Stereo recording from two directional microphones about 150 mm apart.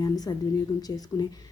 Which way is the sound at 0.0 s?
25° left (ahead or behind).